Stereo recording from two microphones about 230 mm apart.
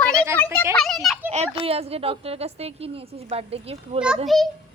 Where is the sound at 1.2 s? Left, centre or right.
Right.